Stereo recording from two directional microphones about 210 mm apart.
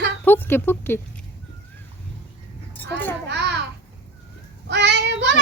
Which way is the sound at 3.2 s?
55° right (ahead or behind).